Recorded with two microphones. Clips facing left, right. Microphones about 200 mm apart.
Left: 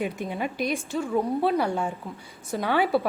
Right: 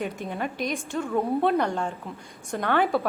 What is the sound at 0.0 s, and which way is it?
A woman's voice, 10° left (ahead or behind).